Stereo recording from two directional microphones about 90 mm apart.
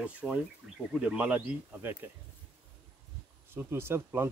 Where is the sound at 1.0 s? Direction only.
15° right (ahead or behind).